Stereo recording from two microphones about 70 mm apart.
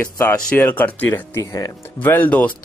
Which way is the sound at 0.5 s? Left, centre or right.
Left.